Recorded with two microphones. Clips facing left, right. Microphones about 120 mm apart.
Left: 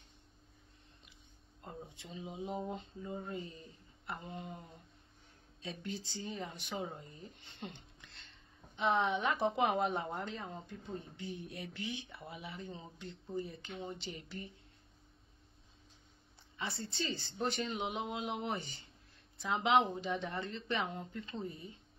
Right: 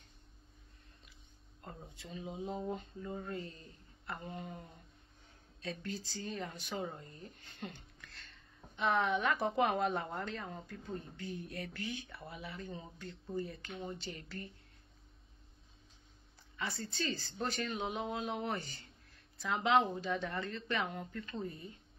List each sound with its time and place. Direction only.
1.6 s a woman's voice: 20° left (ahead or behind)
5.6 s a woman's voice: 20° left (ahead or behind)
16.5 s a woman's voice: 25° left (ahead or behind)